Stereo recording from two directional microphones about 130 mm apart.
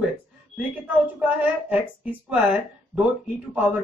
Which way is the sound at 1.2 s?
15° right (ahead or behind).